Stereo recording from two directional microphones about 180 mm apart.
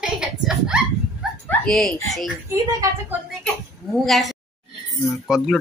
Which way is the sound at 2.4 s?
15° right (ahead or behind).